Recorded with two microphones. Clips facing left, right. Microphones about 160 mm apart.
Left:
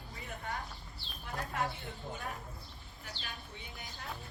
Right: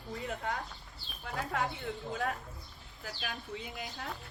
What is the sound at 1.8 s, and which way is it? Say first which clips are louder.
Speech: right 7 dB; 80° right.